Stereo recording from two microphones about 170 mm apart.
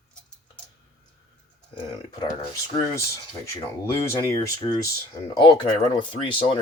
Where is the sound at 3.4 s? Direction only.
15° left (ahead or behind).